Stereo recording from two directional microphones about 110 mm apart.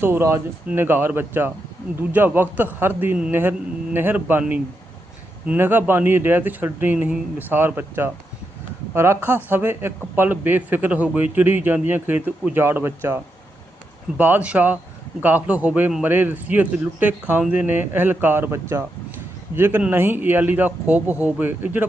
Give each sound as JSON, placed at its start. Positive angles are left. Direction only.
{"t": 0.0, "sound": "speech", "side_deg": -20}